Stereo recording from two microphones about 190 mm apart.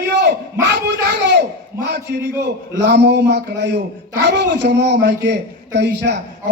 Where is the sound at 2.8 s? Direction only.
65° right (ahead or behind).